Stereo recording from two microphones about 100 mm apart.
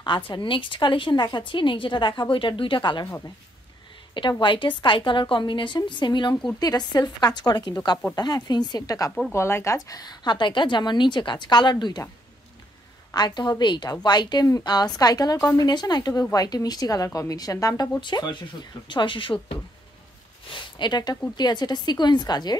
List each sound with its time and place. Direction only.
0.0 s a woman's voice: 50° left (ahead or behind)
4.1 s a woman's voice: 55° left (ahead or behind); by 9.1 s 35° left (ahead or behind)
9.3 s a woman's voice: 25° left (ahead or behind); by 12.0 s 45° left (ahead or behind)
13.1 s a woman's voice: 45° left (ahead or behind)
18.0 s a woman's voice: 50° left (ahead or behind)